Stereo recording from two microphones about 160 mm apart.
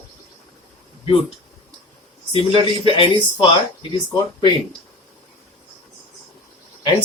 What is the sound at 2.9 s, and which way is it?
Speech, 35° left (ahead or behind).